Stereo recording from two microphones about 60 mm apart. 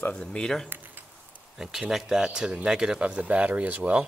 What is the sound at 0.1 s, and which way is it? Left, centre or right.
Speech, centre.